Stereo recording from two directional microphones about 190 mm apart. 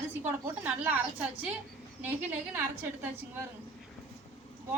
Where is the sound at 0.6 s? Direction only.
10° right (ahead or behind).